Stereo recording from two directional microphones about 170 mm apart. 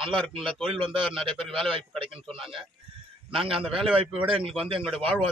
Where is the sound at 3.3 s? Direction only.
30° right (ahead or behind).